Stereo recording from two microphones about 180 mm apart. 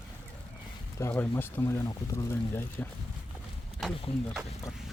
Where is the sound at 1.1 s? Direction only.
10° left (ahead or behind).